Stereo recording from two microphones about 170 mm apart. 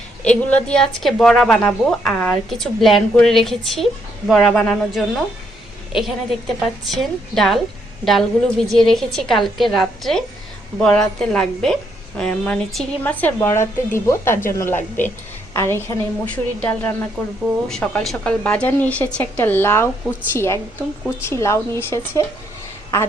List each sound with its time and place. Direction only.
0.3 s a woman's voice: 5° left (ahead or behind)